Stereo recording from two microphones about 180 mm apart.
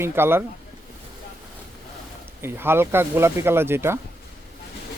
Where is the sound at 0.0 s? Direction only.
10° right (ahead or behind).